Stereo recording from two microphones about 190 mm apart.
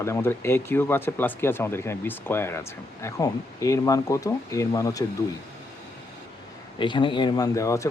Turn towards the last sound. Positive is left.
turn(degrees=15)  # may be behind; listen again after turning